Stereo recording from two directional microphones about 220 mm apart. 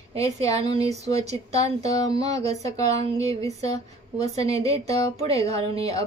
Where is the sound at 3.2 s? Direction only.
15° left (ahead or behind).